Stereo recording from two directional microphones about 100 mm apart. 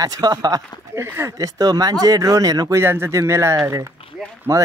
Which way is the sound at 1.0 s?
30° right (ahead or behind).